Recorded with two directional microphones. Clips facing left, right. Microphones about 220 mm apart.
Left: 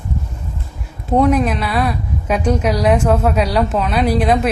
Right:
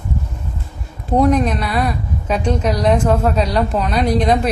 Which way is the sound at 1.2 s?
5° left (ahead or behind).